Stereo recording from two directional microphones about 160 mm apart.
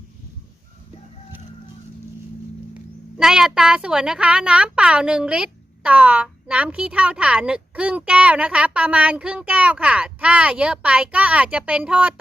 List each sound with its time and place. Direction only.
3.2 s a child's voice: 5° right (ahead or behind)